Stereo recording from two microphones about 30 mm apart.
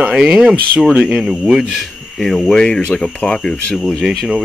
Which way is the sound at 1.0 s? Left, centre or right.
Centre.